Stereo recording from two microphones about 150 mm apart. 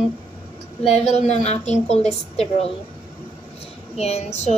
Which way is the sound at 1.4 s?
50° left (ahead or behind).